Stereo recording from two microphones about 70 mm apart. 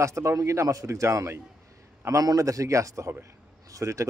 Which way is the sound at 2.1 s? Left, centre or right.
Right.